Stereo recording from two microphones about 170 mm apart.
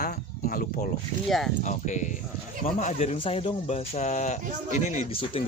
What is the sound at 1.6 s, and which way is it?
Speech, 45° left (ahead or behind).